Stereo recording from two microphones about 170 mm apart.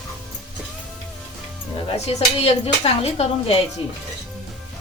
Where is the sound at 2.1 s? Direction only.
35° left (ahead or behind).